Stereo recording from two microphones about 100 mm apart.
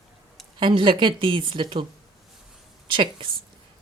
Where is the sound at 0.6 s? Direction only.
55° right (ahead or behind).